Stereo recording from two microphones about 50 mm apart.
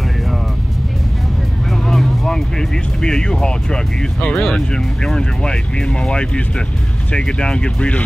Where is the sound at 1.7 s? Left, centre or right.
Centre.